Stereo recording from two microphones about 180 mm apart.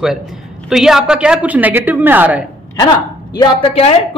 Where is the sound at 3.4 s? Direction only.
30° left (ahead or behind).